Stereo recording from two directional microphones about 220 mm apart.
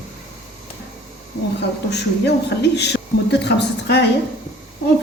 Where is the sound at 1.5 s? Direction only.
50° left (ahead or behind).